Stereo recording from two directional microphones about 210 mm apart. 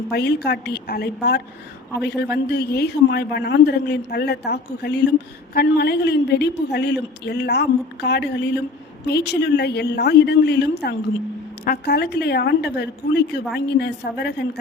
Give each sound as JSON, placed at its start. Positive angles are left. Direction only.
{"t": 0.1, "sound": "a woman's voice", "side_deg": 50}